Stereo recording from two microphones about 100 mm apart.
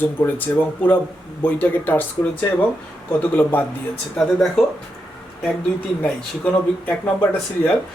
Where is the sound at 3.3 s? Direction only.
20° left (ahead or behind).